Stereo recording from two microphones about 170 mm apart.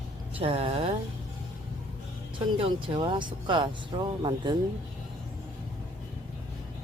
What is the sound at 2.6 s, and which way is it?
Speech, 30° right (ahead or behind).